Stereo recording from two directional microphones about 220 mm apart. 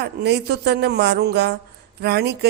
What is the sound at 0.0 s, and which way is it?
Speech, 50° right (ahead or behind).